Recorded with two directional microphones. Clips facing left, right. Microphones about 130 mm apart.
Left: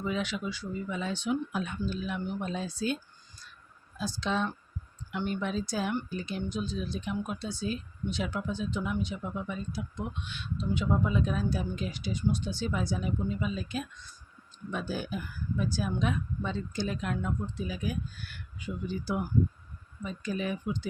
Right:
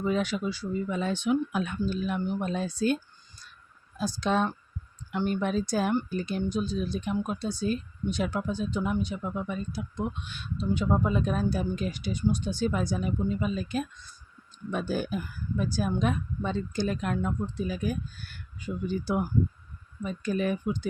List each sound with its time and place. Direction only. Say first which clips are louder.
0.0 s speech: right 5 dB; 40° right (ahead or behind); by 1.8 s 65° right (ahead or behind)
1.9 s speech: right 4 dB; 45° right (ahead or behind)
4.2 s speech: right 4 dB; 50° right (ahead or behind)